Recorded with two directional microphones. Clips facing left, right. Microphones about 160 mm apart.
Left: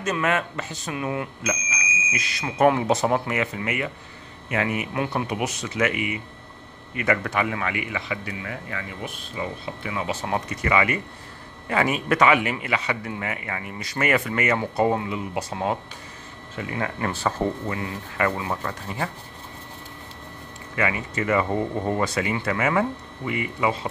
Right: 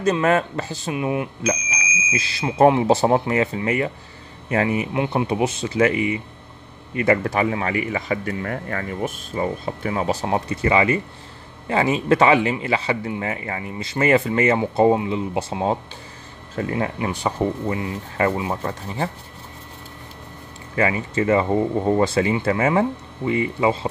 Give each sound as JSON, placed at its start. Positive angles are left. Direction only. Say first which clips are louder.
{"t": 0.0, "sound": "speech", "louder": "right 6 dB", "side_deg": -35}
{"t": 10.3, "sound": "speech", "louder": "right 3 dB", "side_deg": -30}
{"t": 17.0, "sound": "speech", "louder": "left 1 dB", "side_deg": -15}
{"t": 20.7, "sound": "speech", "louder": "right 5 dB", "side_deg": -30}